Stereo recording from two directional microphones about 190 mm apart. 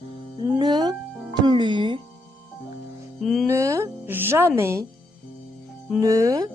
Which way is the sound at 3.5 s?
15° right (ahead or behind).